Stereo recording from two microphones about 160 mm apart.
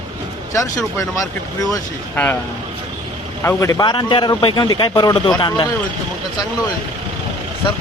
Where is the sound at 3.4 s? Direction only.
20° left (ahead or behind).